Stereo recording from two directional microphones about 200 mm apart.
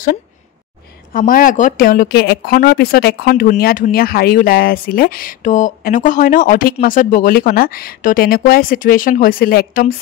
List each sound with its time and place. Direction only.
1.1 s speech: 45° left (ahead or behind)